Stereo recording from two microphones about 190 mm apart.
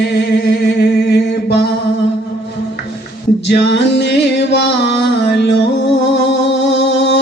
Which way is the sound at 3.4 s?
65° left (ahead or behind).